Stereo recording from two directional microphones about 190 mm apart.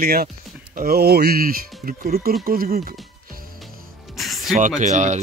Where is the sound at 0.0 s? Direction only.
55° right (ahead or behind).